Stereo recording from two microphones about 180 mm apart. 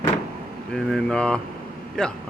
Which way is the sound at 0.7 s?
5° left (ahead or behind).